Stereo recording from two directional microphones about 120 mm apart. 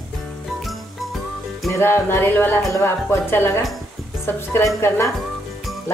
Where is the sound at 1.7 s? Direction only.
20° left (ahead or behind).